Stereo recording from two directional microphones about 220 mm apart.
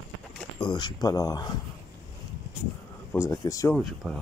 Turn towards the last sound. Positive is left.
turn(degrees=0)  # may be behind; listen again after turning